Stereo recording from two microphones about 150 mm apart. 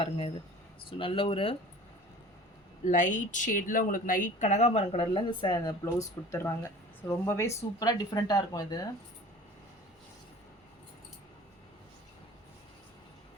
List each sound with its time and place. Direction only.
0.9 s speech: 35° left (ahead or behind)
2.8 s speech: 55° left (ahead or behind); by 5.7 s 30° left (ahead or behind)
5.8 s speech: 20° left (ahead or behind)